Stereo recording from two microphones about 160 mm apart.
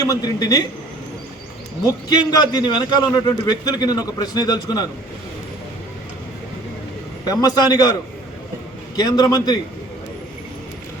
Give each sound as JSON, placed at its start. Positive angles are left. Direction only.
{"t": 0.1, "sound": "a man's voice", "side_deg": 25}
{"t": 1.8, "sound": "a man's voice", "side_deg": 25}
{"t": 7.3, "sound": "a man's voice", "side_deg": 25}
{"t": 9.0, "sound": "a man's voice", "side_deg": 25}